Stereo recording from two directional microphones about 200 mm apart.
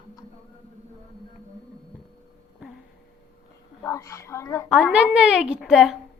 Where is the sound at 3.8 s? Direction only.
15° left (ahead or behind).